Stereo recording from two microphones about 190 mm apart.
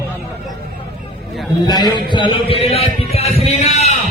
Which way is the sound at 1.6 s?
20° left (ahead or behind).